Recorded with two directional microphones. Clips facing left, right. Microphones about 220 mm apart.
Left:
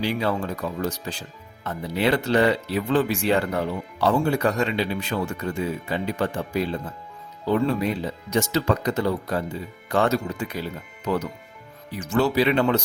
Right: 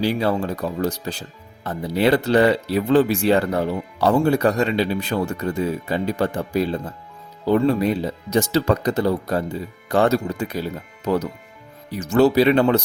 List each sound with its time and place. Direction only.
0.0 s speech: 35° right (ahead or behind)